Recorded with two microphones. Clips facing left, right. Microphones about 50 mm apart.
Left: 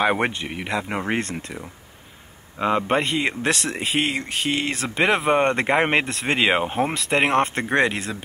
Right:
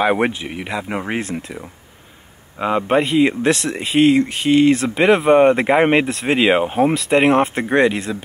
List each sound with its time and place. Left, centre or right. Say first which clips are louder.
0.0 s speech: right 4 dB; centre